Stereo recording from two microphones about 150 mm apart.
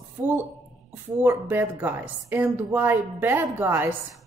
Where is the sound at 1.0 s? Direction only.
15° right (ahead or behind).